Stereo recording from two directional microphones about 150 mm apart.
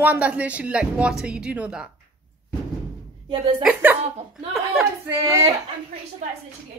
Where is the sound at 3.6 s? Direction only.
10° right (ahead or behind).